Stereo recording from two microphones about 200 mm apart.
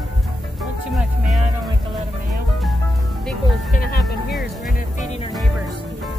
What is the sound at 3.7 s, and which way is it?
Music, 50° left (ahead or behind).